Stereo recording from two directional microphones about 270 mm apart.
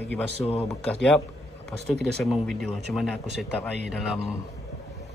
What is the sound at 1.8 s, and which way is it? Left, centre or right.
Speech, right.